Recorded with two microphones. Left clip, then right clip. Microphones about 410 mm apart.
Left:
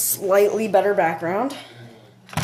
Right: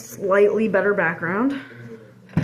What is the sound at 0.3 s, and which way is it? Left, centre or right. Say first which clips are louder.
Speech: even; left.